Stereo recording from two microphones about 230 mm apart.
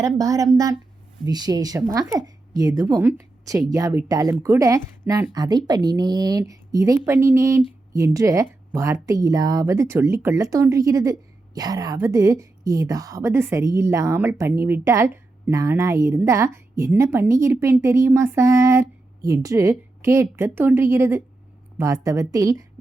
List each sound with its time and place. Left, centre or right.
0.0 s a woman's voice: centre